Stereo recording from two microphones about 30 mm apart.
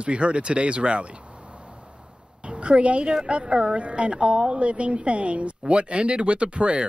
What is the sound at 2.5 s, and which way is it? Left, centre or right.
Speech, right.